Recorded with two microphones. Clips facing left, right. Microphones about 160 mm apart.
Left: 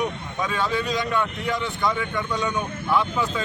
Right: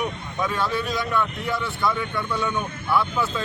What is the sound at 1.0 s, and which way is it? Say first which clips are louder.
Speech: even; 15° left (ahead or behind).